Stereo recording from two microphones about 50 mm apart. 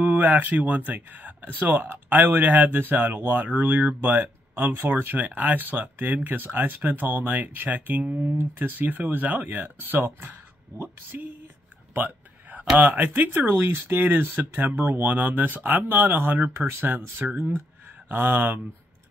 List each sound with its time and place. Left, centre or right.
0.0 s speech: right
5.1 s speech: right
11.9 s a sound: right
12.7 s speech: right